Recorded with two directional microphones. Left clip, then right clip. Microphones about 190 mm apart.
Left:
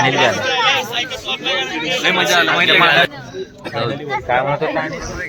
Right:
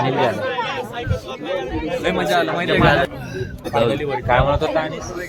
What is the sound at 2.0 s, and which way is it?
Speech, 15° right (ahead or behind).